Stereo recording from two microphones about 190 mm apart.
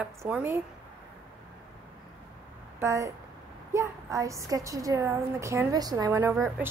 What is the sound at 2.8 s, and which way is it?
A woman's voice, 15° right (ahead or behind).